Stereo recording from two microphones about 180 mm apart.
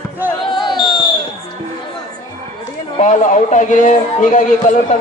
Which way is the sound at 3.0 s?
40° left (ahead or behind).